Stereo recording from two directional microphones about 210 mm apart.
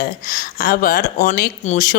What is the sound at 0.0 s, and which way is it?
Speech, 40° left (ahead or behind).